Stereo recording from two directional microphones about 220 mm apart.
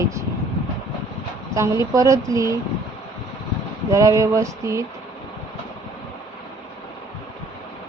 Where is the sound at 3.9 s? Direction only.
15° right (ahead or behind).